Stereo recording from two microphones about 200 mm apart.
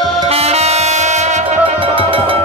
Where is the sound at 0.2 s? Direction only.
30° right (ahead or behind).